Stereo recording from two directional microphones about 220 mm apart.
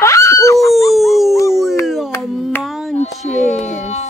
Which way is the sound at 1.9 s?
Centre (ahead or behind).